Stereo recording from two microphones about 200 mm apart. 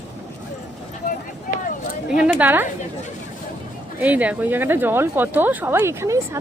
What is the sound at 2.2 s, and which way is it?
Speech, 10° right (ahead or behind).